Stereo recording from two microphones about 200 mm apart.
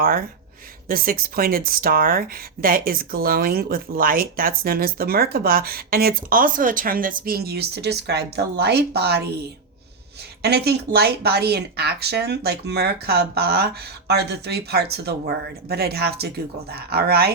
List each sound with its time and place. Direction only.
0.9 s speech: 45° right (ahead or behind)
10.4 s speech: 55° right (ahead or behind)